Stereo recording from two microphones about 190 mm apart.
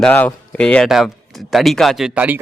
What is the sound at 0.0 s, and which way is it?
Speech, 10° left (ahead or behind).